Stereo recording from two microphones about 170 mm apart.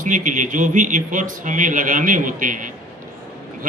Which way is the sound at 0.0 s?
50° right (ahead or behind).